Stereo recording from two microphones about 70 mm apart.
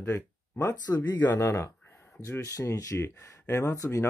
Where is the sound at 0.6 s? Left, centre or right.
Left.